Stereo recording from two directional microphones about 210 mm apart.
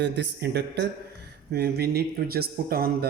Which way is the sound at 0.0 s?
55° right (ahead or behind).